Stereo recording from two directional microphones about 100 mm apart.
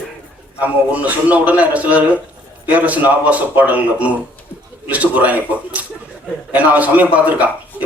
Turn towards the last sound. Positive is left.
turn(degrees=-15)  # may be behind; listen again after turning